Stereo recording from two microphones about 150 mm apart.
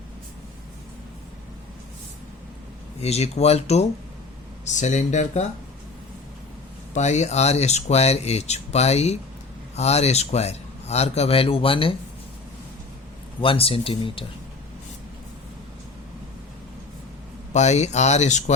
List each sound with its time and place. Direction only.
3.0 s speech: 45° left (ahead or behind)
6.9 s speech: 50° left (ahead or behind)
13.4 s speech: 40° left (ahead or behind)
17.5 s speech: 50° left (ahead or behind)